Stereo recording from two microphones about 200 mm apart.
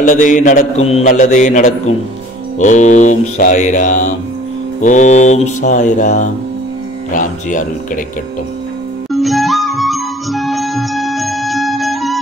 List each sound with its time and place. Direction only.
0.0 s a man's voice: 40° left (ahead or behind)
9.1 s music: centre (ahead or behind)